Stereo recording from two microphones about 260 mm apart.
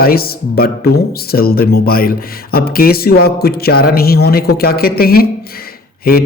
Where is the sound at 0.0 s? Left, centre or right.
Left.